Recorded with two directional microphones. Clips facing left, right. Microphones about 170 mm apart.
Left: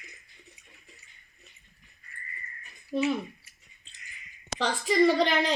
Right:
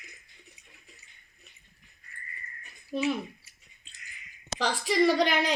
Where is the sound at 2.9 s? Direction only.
5° right (ahead or behind).